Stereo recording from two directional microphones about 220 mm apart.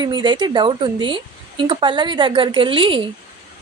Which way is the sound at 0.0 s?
20° right (ahead or behind).